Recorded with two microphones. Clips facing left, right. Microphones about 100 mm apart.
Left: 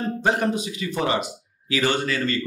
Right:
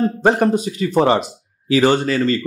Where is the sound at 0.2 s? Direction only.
40° right (ahead or behind).